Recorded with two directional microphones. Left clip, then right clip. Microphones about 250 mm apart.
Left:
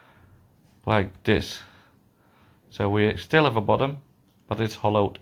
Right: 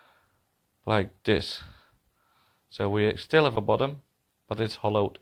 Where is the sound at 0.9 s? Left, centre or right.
Right.